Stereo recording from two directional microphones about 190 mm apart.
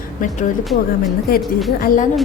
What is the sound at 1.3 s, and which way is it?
Speech, 50° left (ahead or behind).